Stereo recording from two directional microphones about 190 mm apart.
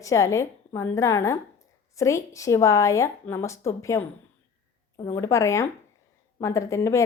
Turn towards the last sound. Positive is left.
turn(degrees=15)  # may be behind; listen again after turning